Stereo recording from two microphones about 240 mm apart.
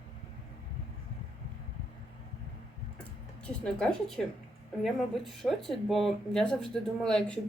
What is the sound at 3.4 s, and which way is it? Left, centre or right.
Speech, centre.